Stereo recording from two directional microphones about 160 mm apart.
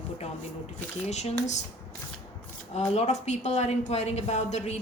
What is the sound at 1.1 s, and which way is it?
Speech, 45° left (ahead or behind).